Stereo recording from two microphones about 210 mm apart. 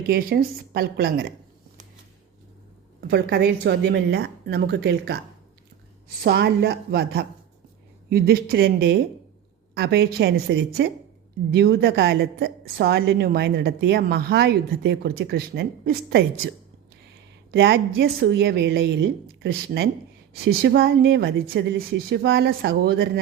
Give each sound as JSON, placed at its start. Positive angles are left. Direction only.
{"t": 0.1, "sound": "a woman's voice", "side_deg": -45}
{"t": 3.1, "sound": "a woman's voice", "side_deg": -50}
{"t": 6.2, "sound": "a woman's voice", "side_deg": -50}
{"t": 17.5, "sound": "a woman's voice", "side_deg": -55}